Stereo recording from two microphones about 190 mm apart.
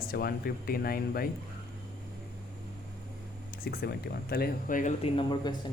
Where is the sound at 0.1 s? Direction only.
55° left (ahead or behind).